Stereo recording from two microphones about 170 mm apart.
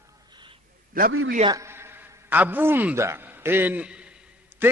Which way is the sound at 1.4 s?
15° right (ahead or behind).